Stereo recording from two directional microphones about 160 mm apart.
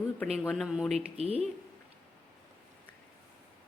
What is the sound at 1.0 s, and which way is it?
Speech, 40° right (ahead or behind).